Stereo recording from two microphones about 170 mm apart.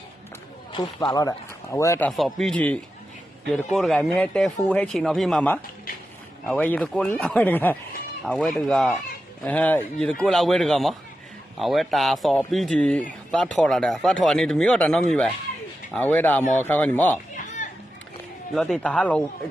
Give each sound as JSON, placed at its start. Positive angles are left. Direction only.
{"t": 0.7, "sound": "speech", "side_deg": 25}
{"t": 2.0, "sound": "a man's voice", "side_deg": 0}
{"t": 17.3, "sound": "music", "side_deg": 45}
{"t": 18.5, "sound": "a man's voice", "side_deg": 5}